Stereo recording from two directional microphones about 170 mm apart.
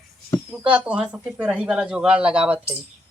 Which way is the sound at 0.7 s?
5° right (ahead or behind).